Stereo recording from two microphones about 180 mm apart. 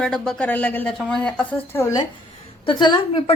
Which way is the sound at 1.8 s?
15° left (ahead or behind).